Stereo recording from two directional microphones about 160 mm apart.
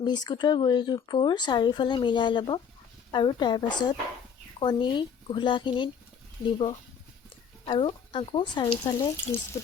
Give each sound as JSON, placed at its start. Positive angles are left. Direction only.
{"t": 0.0, "sound": "speech", "side_deg": 25}
{"t": 7.6, "sound": "speech", "side_deg": 35}